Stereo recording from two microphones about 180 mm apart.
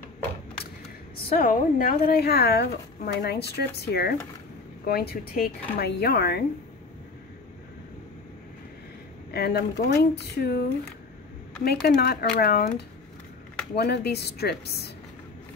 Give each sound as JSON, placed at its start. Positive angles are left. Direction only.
{"t": 1.1, "sound": "speech", "side_deg": 50}
{"t": 9.3, "sound": "speech", "side_deg": 60}
{"t": 11.6, "sound": "speech", "side_deg": 60}